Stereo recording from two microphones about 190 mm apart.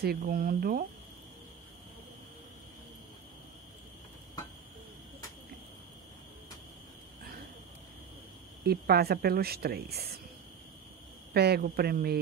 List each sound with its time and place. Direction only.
0.0 s speech: 55° right (ahead or behind)
8.6 s speech: 55° right (ahead or behind)
11.3 s speech: 55° right (ahead or behind)